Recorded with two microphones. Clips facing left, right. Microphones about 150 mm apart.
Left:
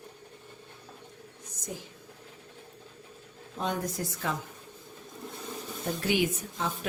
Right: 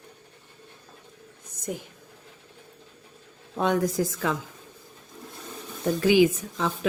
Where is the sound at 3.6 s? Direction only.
80° right.